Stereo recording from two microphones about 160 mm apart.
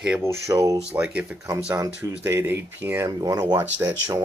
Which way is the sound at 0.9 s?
10° right (ahead or behind).